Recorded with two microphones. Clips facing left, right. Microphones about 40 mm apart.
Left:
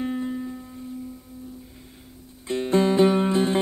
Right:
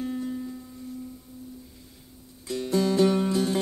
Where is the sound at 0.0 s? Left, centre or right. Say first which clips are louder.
Left 3 dB; left.